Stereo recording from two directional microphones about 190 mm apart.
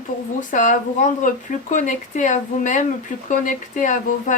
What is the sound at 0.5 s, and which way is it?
Speech, 40° left (ahead or behind).